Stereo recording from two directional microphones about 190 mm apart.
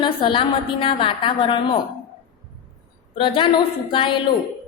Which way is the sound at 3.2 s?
25° left (ahead or behind).